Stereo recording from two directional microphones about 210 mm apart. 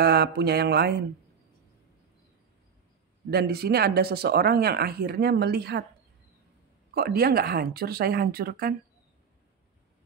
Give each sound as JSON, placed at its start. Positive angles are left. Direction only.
{"t": 0.0, "sound": "speech", "side_deg": -50}
{"t": 3.3, "sound": "speech", "side_deg": -50}
{"t": 6.9, "sound": "speech", "side_deg": -45}